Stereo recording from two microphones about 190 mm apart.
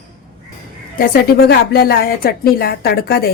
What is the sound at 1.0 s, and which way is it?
A woman's voice, 55° left (ahead or behind).